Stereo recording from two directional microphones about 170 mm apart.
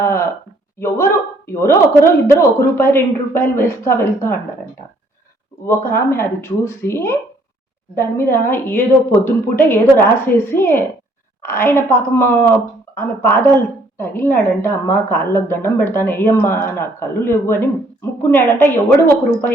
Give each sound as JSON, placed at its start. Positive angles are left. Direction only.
{"t": 0.0, "sound": "a sound", "side_deg": 15}
{"t": 0.8, "sound": "a woman's voice", "side_deg": 15}
{"t": 5.6, "sound": "a woman's voice", "side_deg": 15}